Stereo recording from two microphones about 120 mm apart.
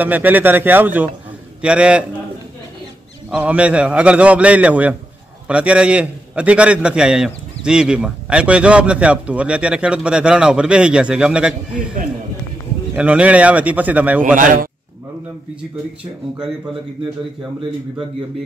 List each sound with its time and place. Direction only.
0.0 s a man's voice: 15° right (ahead or behind)
3.3 s a man's voice: 10° right (ahead or behind)
12.9 s a man's voice: 10° right (ahead or behind)
14.2 s a man's voice: 90° right